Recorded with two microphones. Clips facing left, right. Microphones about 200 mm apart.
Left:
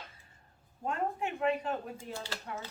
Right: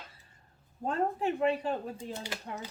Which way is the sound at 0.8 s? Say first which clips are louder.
Right 3 dB; 35° right (ahead or behind).